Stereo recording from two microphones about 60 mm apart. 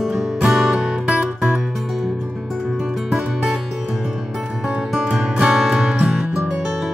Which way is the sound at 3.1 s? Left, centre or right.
Centre.